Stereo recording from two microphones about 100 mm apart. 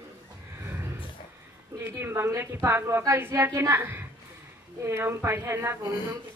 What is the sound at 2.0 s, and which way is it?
Speech, 25° right (ahead or behind).